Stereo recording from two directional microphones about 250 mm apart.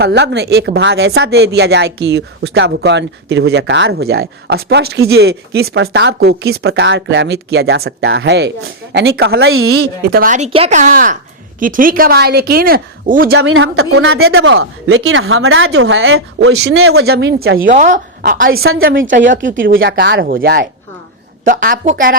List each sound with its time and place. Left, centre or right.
0.0 s speech: right
9.7 s speech: right
13.4 s speech: right
17.1 s speech: right
17.6 s speech: right
18.4 s speech: right
18.8 s speech: right